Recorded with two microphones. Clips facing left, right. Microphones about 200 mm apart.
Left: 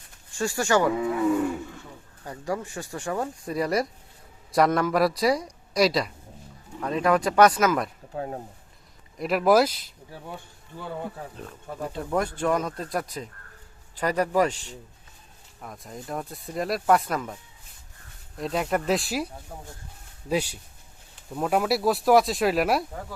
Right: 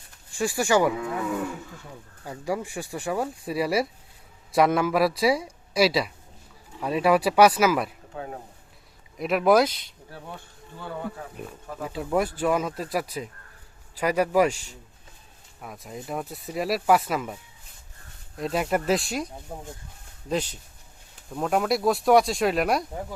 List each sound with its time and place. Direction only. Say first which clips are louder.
0.3 s speech: right 1 dB; 10° right (ahead or behind)
2.2 s speech: right 1 dB; 10° right (ahead or behind)
8.1 s speech: left 4 dB; 35° left (ahead or behind)
9.1 s speech: even; centre (ahead or behind)
11.3 s speech: even; 5° right (ahead or behind)
18.3 s speech: right 1 dB; centre (ahead or behind)
19.5 s speech: right 3 dB; 25° right (ahead or behind)
20.2 s speech: left 1 dB; 10° left (ahead or behind)